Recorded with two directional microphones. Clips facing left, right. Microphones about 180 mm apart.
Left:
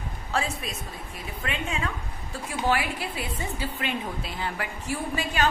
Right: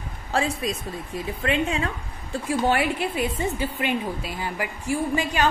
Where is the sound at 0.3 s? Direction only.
35° right (ahead or behind).